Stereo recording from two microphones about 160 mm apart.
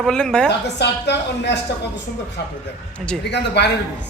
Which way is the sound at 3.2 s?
90° left.